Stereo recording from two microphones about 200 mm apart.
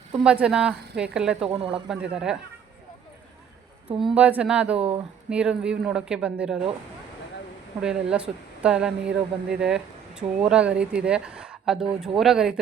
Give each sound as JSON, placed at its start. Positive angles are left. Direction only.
{"t": 0.2, "sound": "speech", "side_deg": -5}
{"t": 1.5, "sound": "speech", "side_deg": -30}
{"t": 1.7, "sound": "speech", "side_deg": -5}
{"t": 4.0, "sound": "speech", "side_deg": -5}
{"t": 4.8, "sound": "speech", "side_deg": -30}
{"t": 5.3, "sound": "speech", "side_deg": -5}
{"t": 7.8, "sound": "speech", "side_deg": -5}